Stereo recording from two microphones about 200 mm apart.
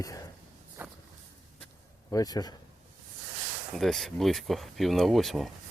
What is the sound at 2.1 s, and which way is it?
Speech, 20° left (ahead or behind).